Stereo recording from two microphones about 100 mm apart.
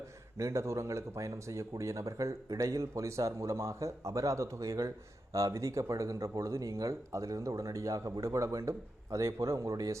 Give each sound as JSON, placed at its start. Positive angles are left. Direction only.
{"t": 0.3, "sound": "speech", "side_deg": -30}